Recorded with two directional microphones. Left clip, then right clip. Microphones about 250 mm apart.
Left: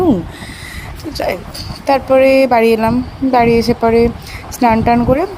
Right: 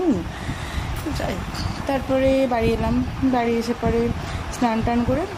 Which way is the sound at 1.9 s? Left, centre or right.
Left.